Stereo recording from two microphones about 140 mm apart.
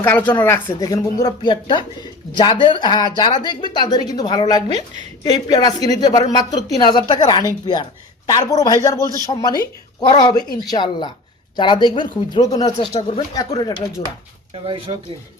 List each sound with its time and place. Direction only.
0.0 s speech: 10° left (ahead or behind); by 9.0 s 25° left (ahead or behind)
9.0 s speech: 25° right (ahead or behind)
9.2 s speech: 30° left (ahead or behind)
14.9 s speech: 35° right (ahead or behind)